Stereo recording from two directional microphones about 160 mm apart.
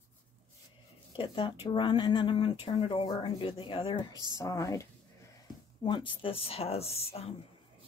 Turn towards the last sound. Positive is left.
turn(degrees=40)  # may be behind; listen again after turning